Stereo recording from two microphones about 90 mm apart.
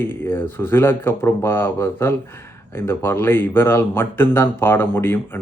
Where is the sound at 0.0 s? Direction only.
25° left (ahead or behind).